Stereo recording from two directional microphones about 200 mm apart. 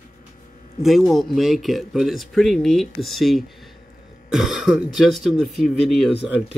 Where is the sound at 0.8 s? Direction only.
Centre (ahead or behind).